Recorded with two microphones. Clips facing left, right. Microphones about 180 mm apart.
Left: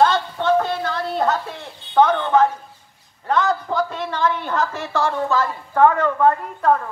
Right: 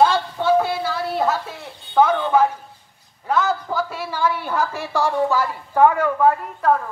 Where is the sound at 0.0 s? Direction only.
10° right (ahead or behind).